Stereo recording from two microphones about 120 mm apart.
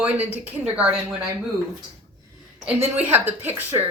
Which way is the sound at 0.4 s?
10° right (ahead or behind).